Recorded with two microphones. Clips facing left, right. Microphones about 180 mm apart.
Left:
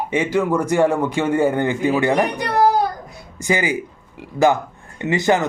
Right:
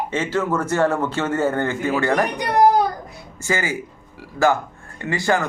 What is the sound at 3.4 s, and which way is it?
Speech, 15° left (ahead or behind).